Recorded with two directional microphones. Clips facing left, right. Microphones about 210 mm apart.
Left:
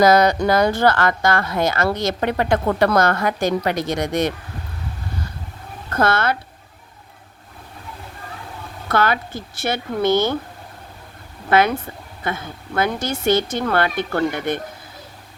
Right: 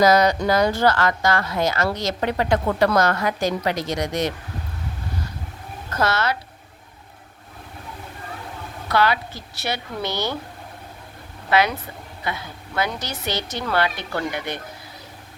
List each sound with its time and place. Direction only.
0.0 s speech: 55° left (ahead or behind)
5.9 s a woman's voice: 55° left (ahead or behind)
8.9 s a woman's voice: 50° left (ahead or behind)
11.4 s a woman's voice: 50° left (ahead or behind)